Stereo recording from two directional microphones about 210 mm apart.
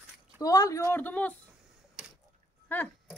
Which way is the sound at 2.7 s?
10° left (ahead or behind).